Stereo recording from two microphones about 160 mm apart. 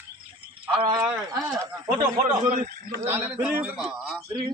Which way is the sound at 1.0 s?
5° right (ahead or behind).